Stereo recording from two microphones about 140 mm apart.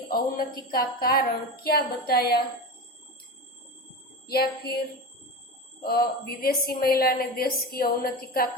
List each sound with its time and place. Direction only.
0.1 s a woman's voice: 90° left
4.3 s a woman's voice: 90° left
5.8 s a woman's voice: 90° left